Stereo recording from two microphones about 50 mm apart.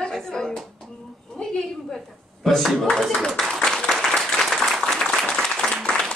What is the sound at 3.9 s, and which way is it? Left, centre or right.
Applause, centre.